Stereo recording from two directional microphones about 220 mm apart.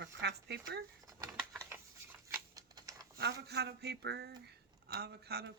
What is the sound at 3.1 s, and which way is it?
Speech, 50° right (ahead or behind).